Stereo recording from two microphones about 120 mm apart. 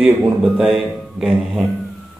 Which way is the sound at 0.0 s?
10° right (ahead or behind).